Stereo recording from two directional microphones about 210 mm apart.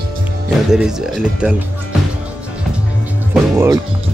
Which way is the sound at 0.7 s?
5° right (ahead or behind).